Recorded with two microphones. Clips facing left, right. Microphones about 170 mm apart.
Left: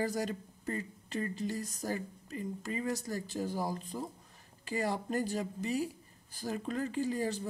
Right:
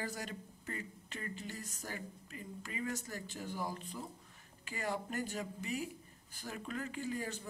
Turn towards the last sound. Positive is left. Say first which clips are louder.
# left 7 dB
turn(degrees=35)  # may be behind; listen again after turning